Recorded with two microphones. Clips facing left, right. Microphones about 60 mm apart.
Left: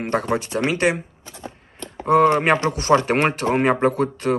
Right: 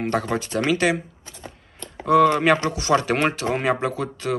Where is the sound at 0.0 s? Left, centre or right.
Left.